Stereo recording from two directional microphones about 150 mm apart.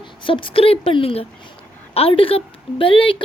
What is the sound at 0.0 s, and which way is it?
A woman's voice, 35° left (ahead or behind).